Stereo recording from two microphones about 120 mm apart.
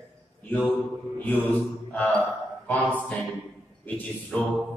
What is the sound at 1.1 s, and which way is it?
Mantra, 15° left (ahead or behind).